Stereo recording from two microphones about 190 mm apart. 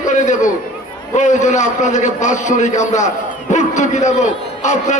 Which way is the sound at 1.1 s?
40° left (ahead or behind).